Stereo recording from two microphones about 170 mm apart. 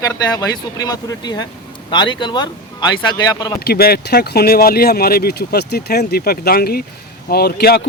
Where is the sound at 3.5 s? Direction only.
65° left (ahead or behind).